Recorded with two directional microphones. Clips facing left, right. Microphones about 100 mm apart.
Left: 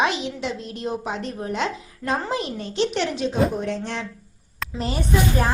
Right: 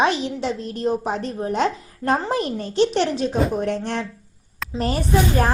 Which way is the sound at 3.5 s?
50° right (ahead or behind).